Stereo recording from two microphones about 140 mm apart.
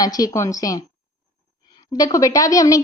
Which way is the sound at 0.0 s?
25° left (ahead or behind).